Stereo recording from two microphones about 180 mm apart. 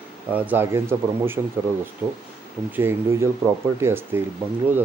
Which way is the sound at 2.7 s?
10° right (ahead or behind).